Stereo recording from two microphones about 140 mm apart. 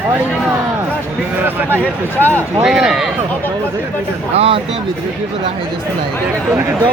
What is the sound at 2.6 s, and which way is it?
Speech, 5° right (ahead or behind).